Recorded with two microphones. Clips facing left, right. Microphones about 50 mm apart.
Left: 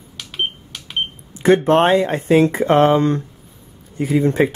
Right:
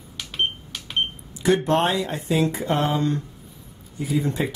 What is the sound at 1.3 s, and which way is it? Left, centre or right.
Speech, left.